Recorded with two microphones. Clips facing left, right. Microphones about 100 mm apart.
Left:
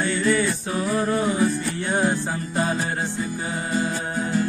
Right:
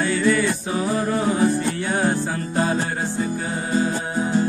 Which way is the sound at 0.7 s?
25° right (ahead or behind).